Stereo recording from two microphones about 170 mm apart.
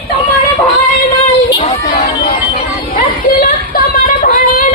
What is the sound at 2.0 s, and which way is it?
Music, 65° left (ahead or behind).